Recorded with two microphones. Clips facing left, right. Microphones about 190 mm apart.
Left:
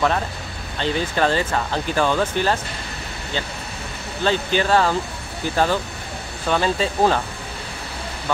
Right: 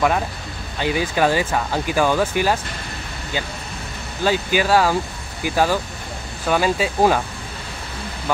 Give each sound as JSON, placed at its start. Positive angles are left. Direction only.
{"t": 0.7, "sound": "speech", "side_deg": -10}
{"t": 4.2, "sound": "speech", "side_deg": -10}